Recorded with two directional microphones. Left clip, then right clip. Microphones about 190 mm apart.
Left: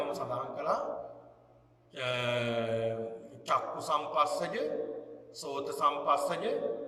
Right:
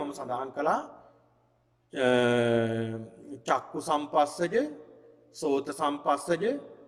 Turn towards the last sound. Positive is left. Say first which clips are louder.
# right 2 dB
turn(degrees=-45)  # may be behind; listen again after turning